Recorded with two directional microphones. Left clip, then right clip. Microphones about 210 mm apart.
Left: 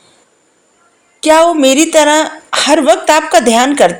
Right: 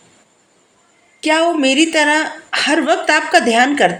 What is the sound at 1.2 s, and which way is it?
A woman's voice, 35° left (ahead or behind).